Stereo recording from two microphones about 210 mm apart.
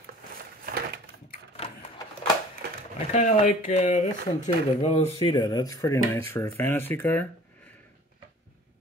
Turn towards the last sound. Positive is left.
turn(degrees=5)  # may be behind; listen again after turning